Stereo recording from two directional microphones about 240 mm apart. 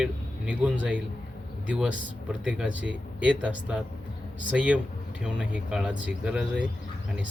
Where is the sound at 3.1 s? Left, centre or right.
Centre.